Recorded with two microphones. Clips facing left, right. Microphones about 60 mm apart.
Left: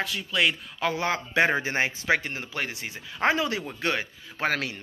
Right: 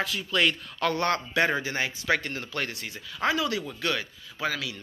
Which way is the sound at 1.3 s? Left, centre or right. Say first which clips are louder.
Left 2 dB; left.